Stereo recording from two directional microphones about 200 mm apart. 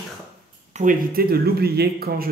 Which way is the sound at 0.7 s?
40° right (ahead or behind).